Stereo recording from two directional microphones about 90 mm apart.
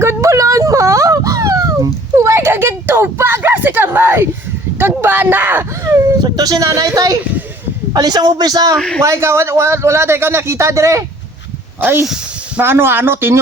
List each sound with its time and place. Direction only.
0.0 s a sound: 35° right (ahead or behind)
4.8 s speech: 25° right (ahead or behind)
6.2 s speech: 45° right (ahead or behind)
9.0 s speech: 30° right (ahead or behind)
11.8 s speech: 25° right (ahead or behind)